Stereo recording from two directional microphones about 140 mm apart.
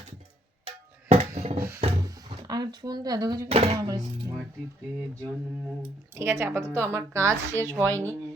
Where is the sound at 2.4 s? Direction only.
30° right (ahead or behind).